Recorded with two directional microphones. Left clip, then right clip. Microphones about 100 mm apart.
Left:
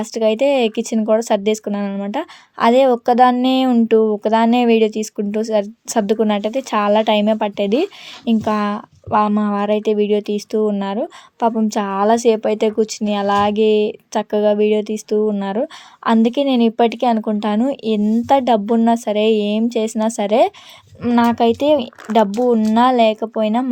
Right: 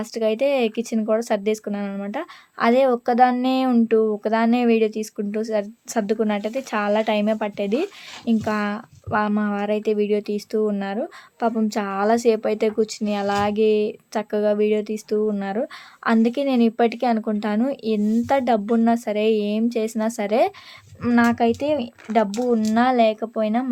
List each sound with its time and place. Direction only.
0.0 s speech: 40° left (ahead or behind)
21.2 s speech: 50° left (ahead or behind)
22.6 s speech: 45° left (ahead or behind)